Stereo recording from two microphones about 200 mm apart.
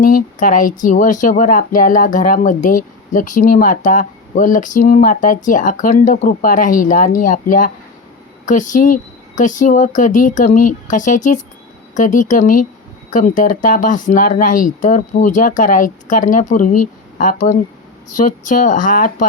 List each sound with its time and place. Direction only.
0.0 s speech: 40° left (ahead or behind)